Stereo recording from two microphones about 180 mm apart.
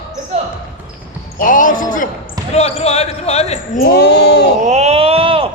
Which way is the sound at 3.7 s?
60° left (ahead or behind).